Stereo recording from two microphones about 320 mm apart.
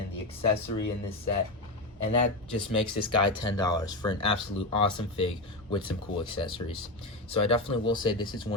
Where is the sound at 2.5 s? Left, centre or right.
Centre.